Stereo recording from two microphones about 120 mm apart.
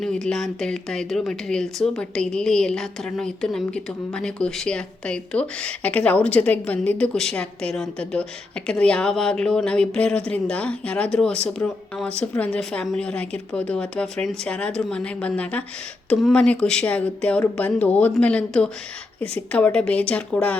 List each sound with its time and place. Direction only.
0.0 s speech: 5° left (ahead or behind)